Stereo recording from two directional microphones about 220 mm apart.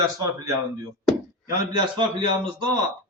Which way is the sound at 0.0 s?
15° right (ahead or behind).